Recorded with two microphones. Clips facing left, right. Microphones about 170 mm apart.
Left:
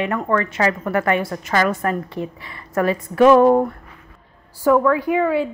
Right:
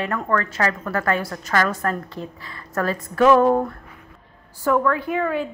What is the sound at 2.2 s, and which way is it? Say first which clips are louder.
Speech: left 6 dB; 65° left (ahead or behind).